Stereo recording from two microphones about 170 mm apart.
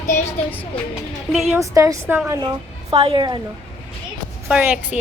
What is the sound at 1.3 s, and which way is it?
Speech, centre (ahead or behind).